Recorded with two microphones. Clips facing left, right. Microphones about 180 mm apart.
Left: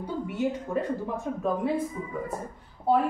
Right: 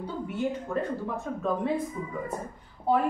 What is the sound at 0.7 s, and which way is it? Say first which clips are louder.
Speech: even; 10° left (ahead or behind).